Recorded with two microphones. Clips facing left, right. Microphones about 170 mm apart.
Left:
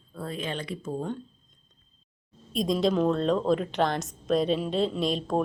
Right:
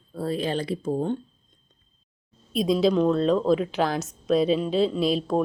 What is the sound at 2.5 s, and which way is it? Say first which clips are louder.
A woman's voice: right 4 dB; 5° right (ahead or behind).